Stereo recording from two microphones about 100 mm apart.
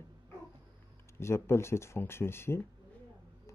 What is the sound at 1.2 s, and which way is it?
Speech, 25° left (ahead or behind).